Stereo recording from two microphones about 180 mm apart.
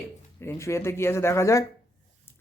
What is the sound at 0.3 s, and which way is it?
Speech, 15° left (ahead or behind).